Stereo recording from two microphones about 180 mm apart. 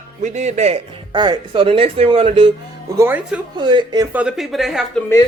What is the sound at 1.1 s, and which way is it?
Speech, 25° right (ahead or behind).